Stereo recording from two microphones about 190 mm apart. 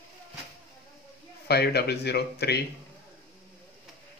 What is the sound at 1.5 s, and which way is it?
Speech, 60° left (ahead or behind).